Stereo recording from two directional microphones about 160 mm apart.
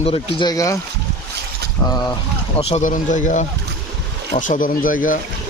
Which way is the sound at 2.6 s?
40° left (ahead or behind).